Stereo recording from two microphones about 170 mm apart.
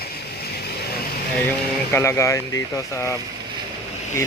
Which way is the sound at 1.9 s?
15° left (ahead or behind).